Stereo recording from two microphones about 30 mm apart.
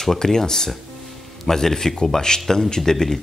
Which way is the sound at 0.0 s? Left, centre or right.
Centre.